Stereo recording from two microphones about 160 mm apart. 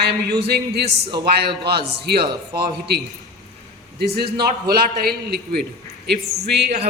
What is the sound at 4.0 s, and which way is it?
A man's voice, 80° right.